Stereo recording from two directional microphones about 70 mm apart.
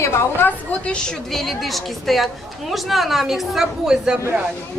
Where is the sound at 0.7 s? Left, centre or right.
Left.